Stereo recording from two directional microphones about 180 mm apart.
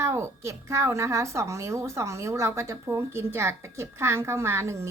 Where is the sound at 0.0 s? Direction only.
15° right (ahead or behind).